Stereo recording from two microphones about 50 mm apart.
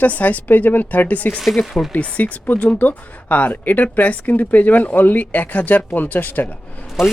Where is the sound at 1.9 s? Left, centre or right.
Left.